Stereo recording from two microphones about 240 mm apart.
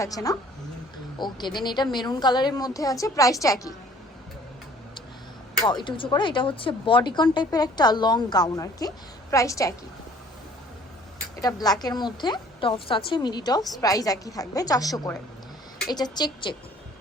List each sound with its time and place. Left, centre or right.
0.0 s a woman's voice: centre
5.6 s a woman's voice: centre
11.3 s a woman's voice: centre